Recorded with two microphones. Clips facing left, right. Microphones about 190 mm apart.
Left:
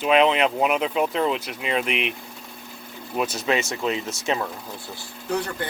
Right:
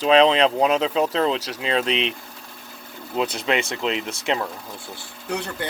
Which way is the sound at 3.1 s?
20° right (ahead or behind).